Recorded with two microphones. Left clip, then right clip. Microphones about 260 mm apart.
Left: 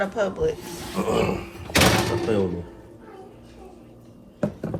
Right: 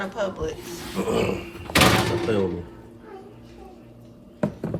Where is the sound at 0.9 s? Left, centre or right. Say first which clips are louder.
Left 1 dB; centre.